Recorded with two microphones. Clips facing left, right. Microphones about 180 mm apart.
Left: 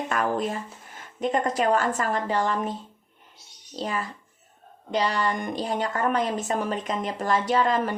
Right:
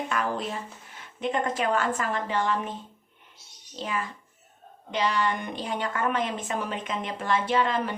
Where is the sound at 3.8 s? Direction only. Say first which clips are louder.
Left 2 dB; 40° left (ahead or behind).